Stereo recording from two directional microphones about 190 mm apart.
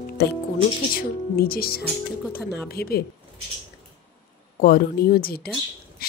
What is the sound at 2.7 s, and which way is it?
Music, 55° left (ahead or behind).